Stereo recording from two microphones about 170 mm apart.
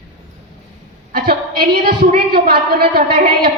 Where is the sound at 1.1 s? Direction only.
60° right (ahead or behind).